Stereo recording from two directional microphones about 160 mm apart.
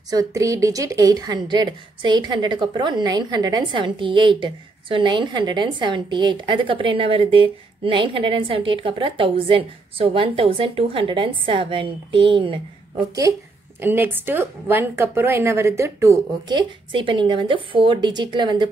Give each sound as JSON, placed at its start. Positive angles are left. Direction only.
{"t": 0.1, "sound": "speech", "side_deg": -20}
{"t": 13.7, "sound": "speech", "side_deg": -15}